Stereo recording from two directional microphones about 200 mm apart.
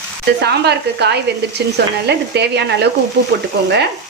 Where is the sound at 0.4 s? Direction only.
55° right (ahead or behind).